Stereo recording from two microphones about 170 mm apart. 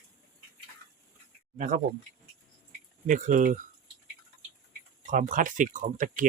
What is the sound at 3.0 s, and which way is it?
Speech, 50° right (ahead or behind).